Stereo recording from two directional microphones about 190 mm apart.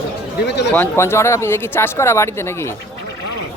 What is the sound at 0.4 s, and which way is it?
Speech, 65° left (ahead or behind).